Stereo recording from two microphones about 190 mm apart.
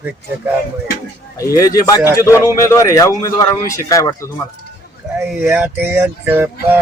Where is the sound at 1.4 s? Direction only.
15° left (ahead or behind).